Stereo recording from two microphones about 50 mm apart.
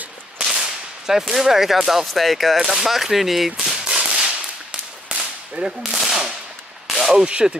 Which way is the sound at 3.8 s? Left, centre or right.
Centre.